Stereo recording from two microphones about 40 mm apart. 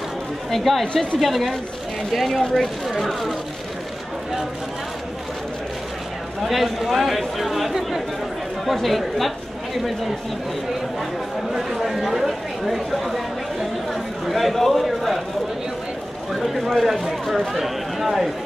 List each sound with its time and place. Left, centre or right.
0.5 s speech: centre
2.9 s a sound: centre
6.4 s speech: centre
11.5 s speech: centre
16.3 s speech: centre